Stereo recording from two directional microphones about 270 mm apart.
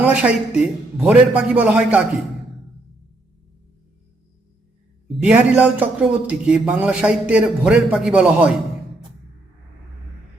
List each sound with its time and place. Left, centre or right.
0.0 s a man's voice: centre
5.0 s a man's voice: centre